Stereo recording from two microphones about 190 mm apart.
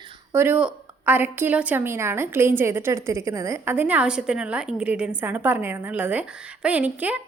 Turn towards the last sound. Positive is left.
turn(degrees=-10)  # may be behind; listen again after turning